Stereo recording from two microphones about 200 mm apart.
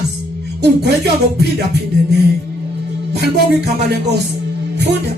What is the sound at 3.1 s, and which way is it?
Speech, 55° right (ahead or behind).